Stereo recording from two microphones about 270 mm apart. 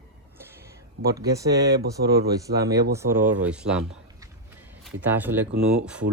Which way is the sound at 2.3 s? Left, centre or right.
Centre.